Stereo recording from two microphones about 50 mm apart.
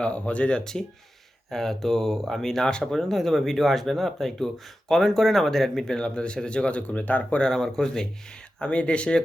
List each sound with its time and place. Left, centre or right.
0.0 s speech: left; by 6.0 s centre
6.0 s speech: centre
7.4 s speech: centre